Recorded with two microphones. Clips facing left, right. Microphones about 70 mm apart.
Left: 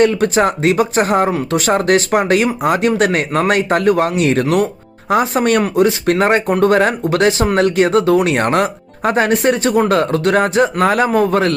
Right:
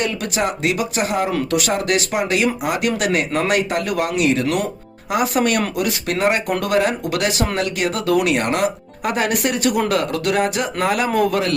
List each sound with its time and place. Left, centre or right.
0.0 s speech: left